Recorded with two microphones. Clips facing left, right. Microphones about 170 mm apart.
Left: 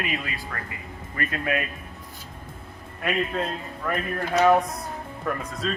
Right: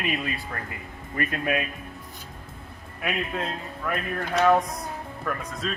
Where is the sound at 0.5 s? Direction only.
25° right (ahead or behind).